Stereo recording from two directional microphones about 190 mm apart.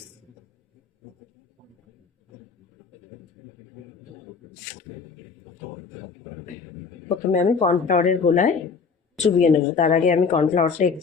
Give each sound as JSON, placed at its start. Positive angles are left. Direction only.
{"t": 7.3, "sound": "a woman's voice", "side_deg": 40}